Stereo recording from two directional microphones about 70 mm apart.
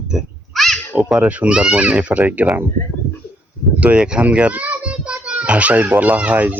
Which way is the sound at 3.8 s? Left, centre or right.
Centre.